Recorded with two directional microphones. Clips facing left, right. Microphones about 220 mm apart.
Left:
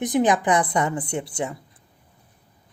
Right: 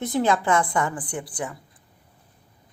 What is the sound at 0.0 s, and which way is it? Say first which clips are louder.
Speech: left 2 dB; 15° left (ahead or behind).